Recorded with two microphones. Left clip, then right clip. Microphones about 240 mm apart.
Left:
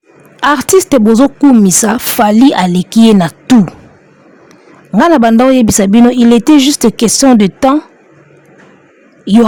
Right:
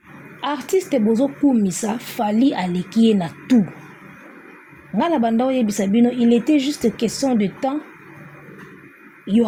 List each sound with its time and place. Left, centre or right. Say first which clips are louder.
0.3 s a woman's voice: left 13 dB; left
4.9 s a woman's voice: left 12 dB; left
9.2 s a man's voice: left 11 dB; left